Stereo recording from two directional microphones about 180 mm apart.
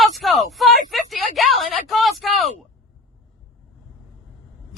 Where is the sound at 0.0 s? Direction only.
Centre (ahead or behind).